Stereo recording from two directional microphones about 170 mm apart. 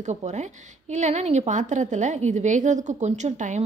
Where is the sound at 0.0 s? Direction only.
45° right (ahead or behind).